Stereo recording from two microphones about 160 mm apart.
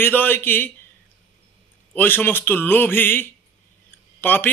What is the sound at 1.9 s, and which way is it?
Speech, 10° left (ahead or behind).